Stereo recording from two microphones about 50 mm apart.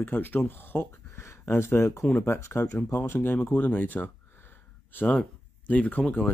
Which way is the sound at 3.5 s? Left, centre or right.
Left.